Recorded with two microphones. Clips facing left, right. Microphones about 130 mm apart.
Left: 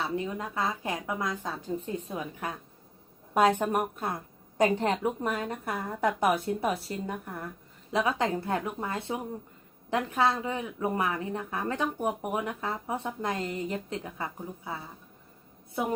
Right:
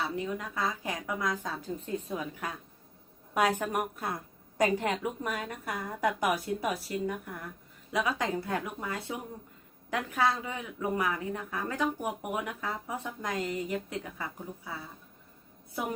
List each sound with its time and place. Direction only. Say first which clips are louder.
0.3 s speech: left 2 dB; 25° left (ahead or behind)